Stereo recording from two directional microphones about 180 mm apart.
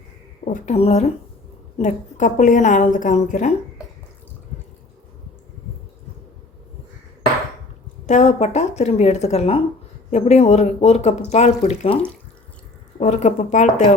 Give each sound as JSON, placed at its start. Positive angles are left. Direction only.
{"t": 0.5, "sound": "a woman's voice", "side_deg": 40}
{"t": 8.0, "sound": "speech", "side_deg": 40}
{"t": 13.0, "sound": "speech", "side_deg": 40}